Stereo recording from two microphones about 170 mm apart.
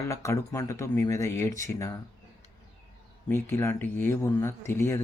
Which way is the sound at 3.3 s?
15° left (ahead or behind).